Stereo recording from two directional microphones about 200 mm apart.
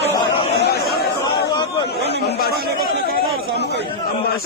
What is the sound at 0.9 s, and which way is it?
Chatter, 50° left (ahead or behind).